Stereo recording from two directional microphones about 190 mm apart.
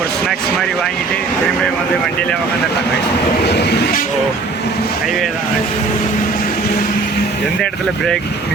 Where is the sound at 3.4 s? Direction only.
60° left (ahead or behind).